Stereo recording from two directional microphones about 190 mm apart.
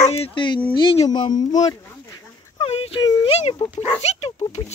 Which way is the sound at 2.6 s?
30° left (ahead or behind).